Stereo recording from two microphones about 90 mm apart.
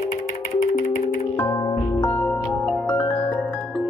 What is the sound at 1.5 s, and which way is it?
Music, 45° left (ahead or behind).